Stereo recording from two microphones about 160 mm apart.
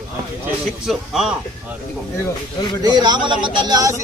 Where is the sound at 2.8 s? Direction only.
25° right (ahead or behind).